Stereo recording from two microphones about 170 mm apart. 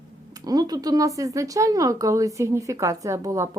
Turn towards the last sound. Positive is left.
turn(degrees=-20)  # may be behind; listen again after turning